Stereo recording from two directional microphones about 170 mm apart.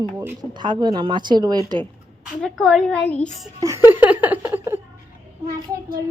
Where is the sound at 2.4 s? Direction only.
5° left (ahead or behind).